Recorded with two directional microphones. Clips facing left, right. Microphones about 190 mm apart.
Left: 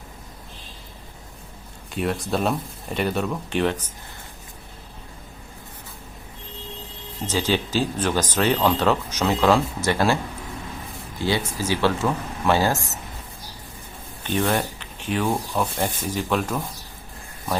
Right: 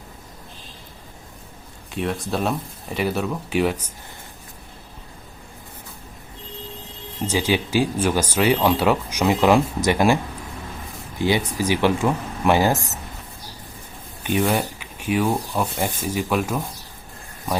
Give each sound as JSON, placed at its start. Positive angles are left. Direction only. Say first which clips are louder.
{"t": 1.9, "sound": "speech", "louder": "even", "side_deg": 0}
{"t": 7.3, "sound": "speech", "louder": "right 2 dB", "side_deg": -10}
{"t": 11.2, "sound": "speech", "louder": "right 3 dB", "side_deg": -15}
{"t": 12.7, "sound": "speech", "louder": "right 3 dB", "side_deg": 0}
{"t": 14.3, "sound": "speech", "louder": "right 2 dB", "side_deg": -10}